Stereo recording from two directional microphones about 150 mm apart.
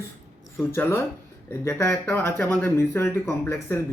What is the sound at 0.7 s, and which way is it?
Speech, 15° left (ahead or behind).